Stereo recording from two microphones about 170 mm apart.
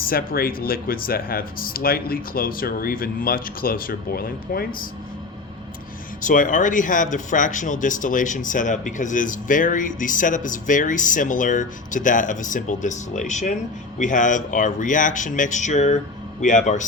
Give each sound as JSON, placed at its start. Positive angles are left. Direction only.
{"t": 0.0, "sound": "speech", "side_deg": 60}
{"t": 6.2, "sound": "speech", "side_deg": 50}